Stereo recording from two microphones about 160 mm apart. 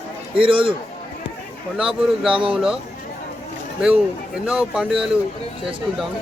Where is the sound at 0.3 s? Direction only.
35° right (ahead or behind).